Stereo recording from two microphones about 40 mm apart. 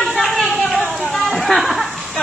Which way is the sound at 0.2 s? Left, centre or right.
Centre.